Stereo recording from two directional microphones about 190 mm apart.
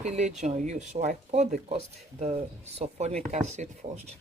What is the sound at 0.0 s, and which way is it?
Speech, 35° right (ahead or behind).